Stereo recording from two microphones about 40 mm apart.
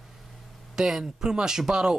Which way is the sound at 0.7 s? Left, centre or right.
Centre.